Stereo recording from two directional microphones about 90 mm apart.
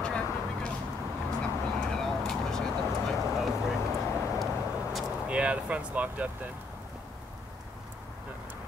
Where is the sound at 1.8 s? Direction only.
5° left (ahead or behind).